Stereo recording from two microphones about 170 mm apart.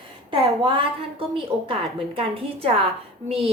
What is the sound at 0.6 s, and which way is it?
A woman's voice, 30° right (ahead or behind).